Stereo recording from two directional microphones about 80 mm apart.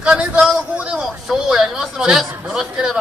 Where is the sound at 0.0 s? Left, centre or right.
Centre.